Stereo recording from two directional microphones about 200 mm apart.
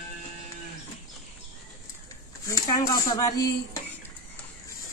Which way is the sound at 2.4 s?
15° left (ahead or behind).